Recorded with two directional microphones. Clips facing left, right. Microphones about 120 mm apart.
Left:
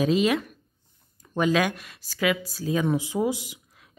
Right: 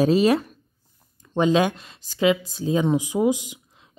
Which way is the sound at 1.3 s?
25° right (ahead or behind).